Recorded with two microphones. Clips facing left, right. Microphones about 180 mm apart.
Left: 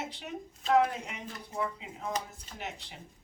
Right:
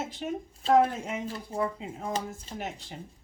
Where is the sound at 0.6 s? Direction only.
30° right (ahead or behind).